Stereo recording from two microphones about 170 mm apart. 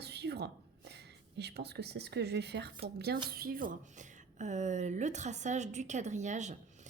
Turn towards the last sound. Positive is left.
turn(degrees=-45)  # may be behind; listen again after turning